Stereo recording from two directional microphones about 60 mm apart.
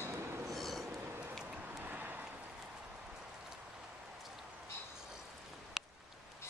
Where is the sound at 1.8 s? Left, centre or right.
Right.